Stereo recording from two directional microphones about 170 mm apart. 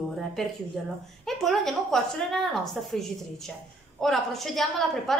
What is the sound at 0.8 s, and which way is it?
A woman's voice, centre (ahead or behind).